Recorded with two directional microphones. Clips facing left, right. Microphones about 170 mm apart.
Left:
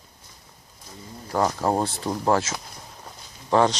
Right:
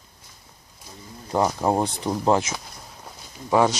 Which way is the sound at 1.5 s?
15° right (ahead or behind).